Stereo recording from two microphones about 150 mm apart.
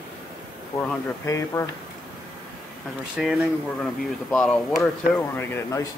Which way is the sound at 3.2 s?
Centre (ahead or behind).